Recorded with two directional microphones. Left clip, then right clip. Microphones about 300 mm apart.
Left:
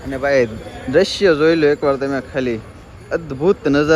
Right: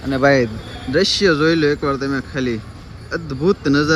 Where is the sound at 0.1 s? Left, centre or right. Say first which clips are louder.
Right 4 dB; right.